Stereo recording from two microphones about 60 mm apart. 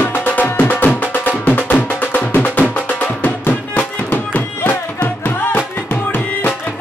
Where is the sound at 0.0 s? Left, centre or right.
Left.